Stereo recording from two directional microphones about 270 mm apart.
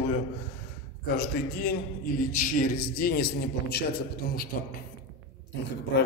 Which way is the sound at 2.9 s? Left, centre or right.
Left.